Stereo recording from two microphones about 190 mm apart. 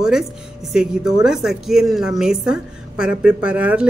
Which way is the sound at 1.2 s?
Centre (ahead or behind).